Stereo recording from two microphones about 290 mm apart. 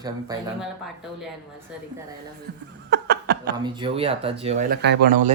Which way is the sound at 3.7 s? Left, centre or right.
Centre.